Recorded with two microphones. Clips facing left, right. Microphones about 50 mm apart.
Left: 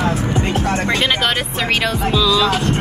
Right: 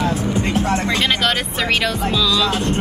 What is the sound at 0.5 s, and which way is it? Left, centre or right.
Music, left.